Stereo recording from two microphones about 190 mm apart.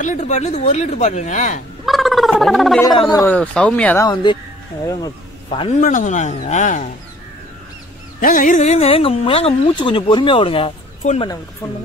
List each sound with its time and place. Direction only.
0.0 s speech: 40° left (ahead or behind)
1.9 s speech: centre (ahead or behind)
2.8 s speech: 20° left (ahead or behind)
3.3 s speech: 5° left (ahead or behind)
4.1 s speech: 25° left (ahead or behind)
5.8 s speech: 40° left (ahead or behind)
8.2 s speech: 45° left (ahead or behind); by 11.3 s 30° left (ahead or behind)